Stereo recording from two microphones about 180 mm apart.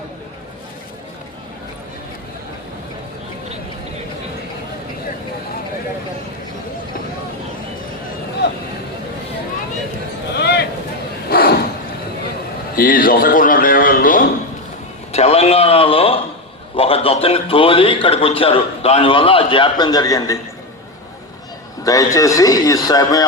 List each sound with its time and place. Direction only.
10.3 s a sound: 65° left (ahead or behind)
12.7 s a man's voice: 50° left (ahead or behind)
15.1 s a man's voice: 35° left (ahead or behind); by 20.4 s 20° left (ahead or behind)
21.8 s a man's voice: 20° left (ahead or behind)